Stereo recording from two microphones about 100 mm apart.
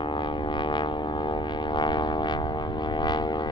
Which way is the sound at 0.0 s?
50° left (ahead or behind).